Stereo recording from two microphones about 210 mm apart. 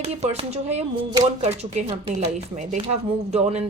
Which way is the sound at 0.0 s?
30° right (ahead or behind).